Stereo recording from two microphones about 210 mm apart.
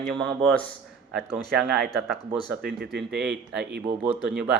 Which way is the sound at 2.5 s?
45° right (ahead or behind).